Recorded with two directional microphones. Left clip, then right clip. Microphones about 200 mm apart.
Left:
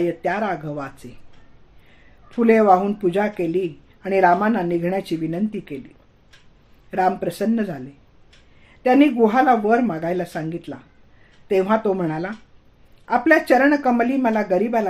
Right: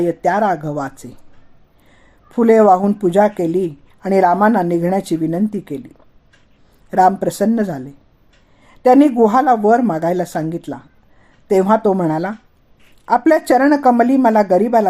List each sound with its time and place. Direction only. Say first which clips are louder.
0.1 s a woman's voice: right 7 dB; 50° right (ahead or behind)
2.3 s a woman's voice: right 4 dB; 45° right (ahead or behind)
6.9 s a woman's voice: right 7 dB; 50° right (ahead or behind)
8.8 s a woman's voice: right 5 dB; 50° right (ahead or behind)